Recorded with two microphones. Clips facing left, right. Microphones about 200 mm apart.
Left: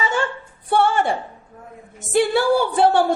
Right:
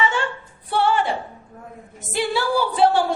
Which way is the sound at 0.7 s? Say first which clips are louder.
Left 2 dB; 50° left (ahead or behind).